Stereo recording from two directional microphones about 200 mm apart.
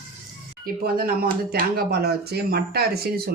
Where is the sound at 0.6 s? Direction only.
50° right (ahead or behind).